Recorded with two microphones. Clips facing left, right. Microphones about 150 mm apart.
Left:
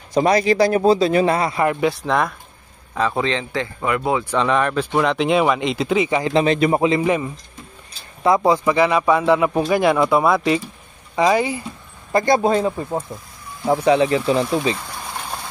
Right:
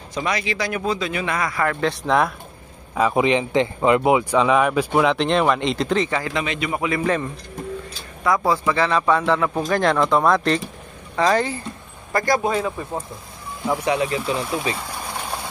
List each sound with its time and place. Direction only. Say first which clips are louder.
0.1 s speech: left 9 dB; 35° left (ahead or behind); by 1.9 s 20° left (ahead or behind)
1.9 s speech: even; centre (ahead or behind)
2.9 s speech: right 3 dB; 10° right (ahead or behind); by 6.3 s 15° left (ahead or behind)
6.3 s speech: left 8 dB; 35° left (ahead or behind)
6.9 s speech: left 3 dB; 15° left (ahead or behind); by 12.8 s 30° left (ahead or behind)
13.8 s speech: left 7 dB; 30° left (ahead or behind)